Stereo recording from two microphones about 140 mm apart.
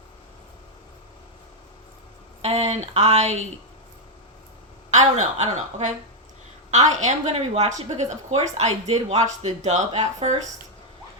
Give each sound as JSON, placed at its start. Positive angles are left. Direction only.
{"t": 2.4, "sound": "a woman's voice", "side_deg": -45}
{"t": 4.9, "sound": "a woman's voice", "side_deg": -55}